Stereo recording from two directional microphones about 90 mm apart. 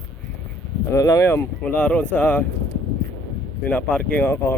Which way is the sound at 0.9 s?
35° left (ahead or behind).